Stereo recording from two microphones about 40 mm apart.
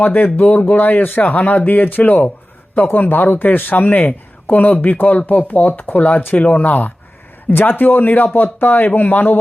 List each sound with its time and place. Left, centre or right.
0.0 s speech: left